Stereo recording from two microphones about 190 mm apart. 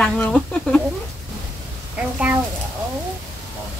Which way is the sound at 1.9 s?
5° right (ahead or behind).